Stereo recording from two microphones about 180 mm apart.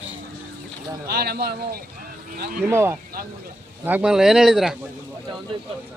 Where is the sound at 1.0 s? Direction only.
60° right (ahead or behind).